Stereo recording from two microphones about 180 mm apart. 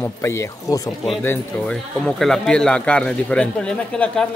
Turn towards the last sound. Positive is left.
turn(degrees=5)  # may be behind; listen again after turning